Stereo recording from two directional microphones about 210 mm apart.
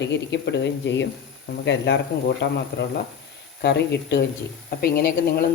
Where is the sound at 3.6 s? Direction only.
55° left (ahead or behind).